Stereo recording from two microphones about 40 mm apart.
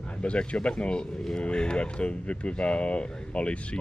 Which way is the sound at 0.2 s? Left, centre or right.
Left.